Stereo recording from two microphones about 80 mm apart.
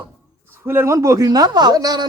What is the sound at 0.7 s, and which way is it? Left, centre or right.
A man's voice, right.